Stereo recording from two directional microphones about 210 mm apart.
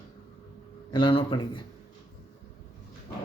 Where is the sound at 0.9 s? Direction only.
25° left (ahead or behind).